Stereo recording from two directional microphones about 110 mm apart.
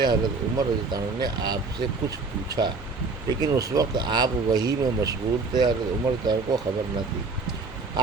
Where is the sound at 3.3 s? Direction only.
35° right (ahead or behind).